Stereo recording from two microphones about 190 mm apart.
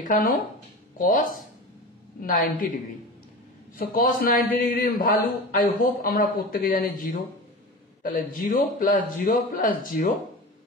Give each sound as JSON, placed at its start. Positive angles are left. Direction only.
{"t": 0.0, "sound": "a man's voice", "side_deg": 45}
{"t": 3.7, "sound": "a man's voice", "side_deg": 50}